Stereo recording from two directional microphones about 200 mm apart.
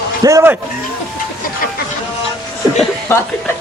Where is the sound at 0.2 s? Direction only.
15° right (ahead or behind).